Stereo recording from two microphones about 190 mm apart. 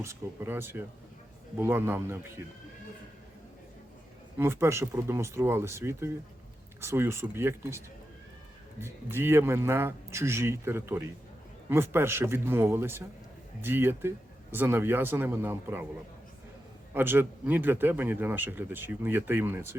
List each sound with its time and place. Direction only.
0.0 s a man's voice: 15° right (ahead or behind)
4.4 s a man's voice: 15° right (ahead or behind)
8.8 s a man's voice: 10° right (ahead or behind)
16.9 s a man's voice: 10° right (ahead or behind)